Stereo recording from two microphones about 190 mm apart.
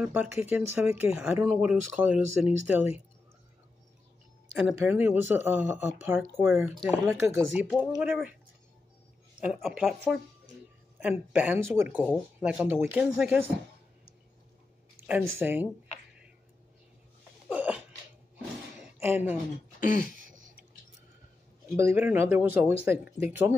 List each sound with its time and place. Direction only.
0.0 s speech: 10° right (ahead or behind)
4.6 s speech: 5° right (ahead or behind)
9.4 s speech: centre (ahead or behind)
11.0 s speech: 5° right (ahead or behind)
15.0 s speech: 10° right (ahead or behind)
17.5 s sneeze: 5° right (ahead or behind)
18.9 s speech: 10° right (ahead or behind)
19.8 s a sound: 45° left (ahead or behind)
21.7 s speech: 15° right (ahead or behind)